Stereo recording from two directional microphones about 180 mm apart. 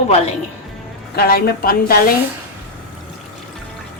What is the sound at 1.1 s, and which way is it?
Speech, 60° left (ahead or behind).